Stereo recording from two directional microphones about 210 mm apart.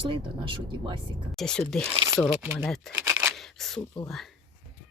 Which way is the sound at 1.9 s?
20° right (ahead or behind).